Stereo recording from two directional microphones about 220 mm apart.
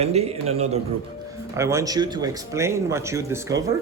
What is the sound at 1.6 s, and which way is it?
Speech, 15° right (ahead or behind).